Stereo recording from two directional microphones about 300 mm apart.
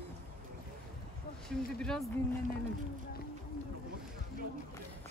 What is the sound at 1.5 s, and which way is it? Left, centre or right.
Speech, centre.